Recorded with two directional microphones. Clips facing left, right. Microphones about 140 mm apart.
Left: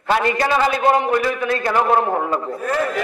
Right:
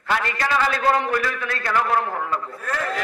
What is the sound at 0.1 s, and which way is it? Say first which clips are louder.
A man's voice: left 5 dB; 25° left (ahead or behind).